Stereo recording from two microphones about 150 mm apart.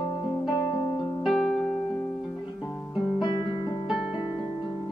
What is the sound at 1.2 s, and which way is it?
Music, centre (ahead or behind).